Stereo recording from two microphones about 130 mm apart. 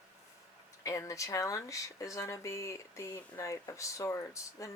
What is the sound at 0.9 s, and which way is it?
Speech, 25° left (ahead or behind).